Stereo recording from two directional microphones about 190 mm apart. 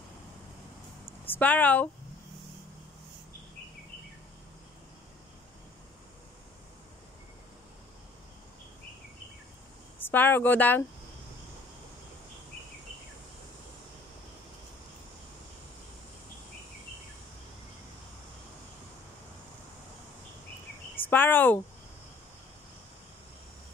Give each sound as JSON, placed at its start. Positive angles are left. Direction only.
{"t": 1.2, "sound": "speech", "side_deg": 10}
{"t": 10.0, "sound": "speech", "side_deg": 10}
{"t": 21.0, "sound": "speech", "side_deg": 10}